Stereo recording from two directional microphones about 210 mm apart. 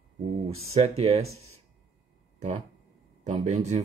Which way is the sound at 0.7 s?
30° right (ahead or behind).